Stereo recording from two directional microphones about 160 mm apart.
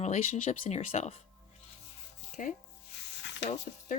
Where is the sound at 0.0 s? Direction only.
40° left (ahead or behind).